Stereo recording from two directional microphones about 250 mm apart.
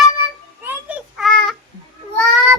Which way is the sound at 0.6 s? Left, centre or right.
Centre.